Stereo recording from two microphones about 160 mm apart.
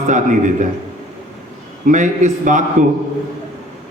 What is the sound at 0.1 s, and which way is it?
Speech, 50° right (ahead or behind).